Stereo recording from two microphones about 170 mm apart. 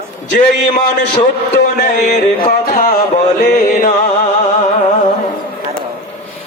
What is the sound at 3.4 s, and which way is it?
Mantra, 60° left (ahead or behind).